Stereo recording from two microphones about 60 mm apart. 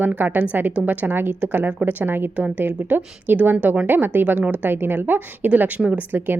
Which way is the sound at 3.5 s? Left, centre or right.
Right.